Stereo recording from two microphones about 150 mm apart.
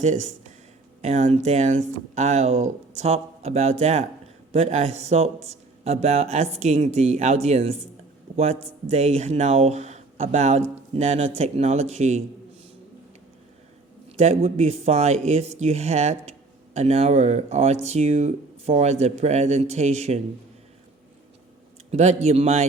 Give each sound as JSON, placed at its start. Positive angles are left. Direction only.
{"t": 0.0, "sound": "speech", "side_deg": -50}
{"t": 14.2, "sound": "speech", "side_deg": -45}
{"t": 21.9, "sound": "speech", "side_deg": -45}